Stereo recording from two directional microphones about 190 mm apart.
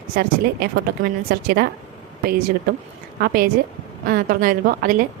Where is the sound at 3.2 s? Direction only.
50° right (ahead or behind).